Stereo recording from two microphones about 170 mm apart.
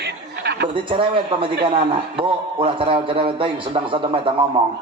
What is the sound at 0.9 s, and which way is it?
A man's voice, 30° right (ahead or behind).